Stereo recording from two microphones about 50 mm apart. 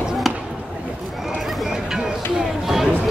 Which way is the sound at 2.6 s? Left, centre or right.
Centre.